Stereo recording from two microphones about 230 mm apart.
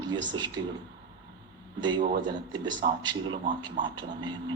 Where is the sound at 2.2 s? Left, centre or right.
Centre.